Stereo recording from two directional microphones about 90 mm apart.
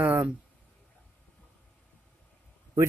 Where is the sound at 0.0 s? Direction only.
15° right (ahead or behind).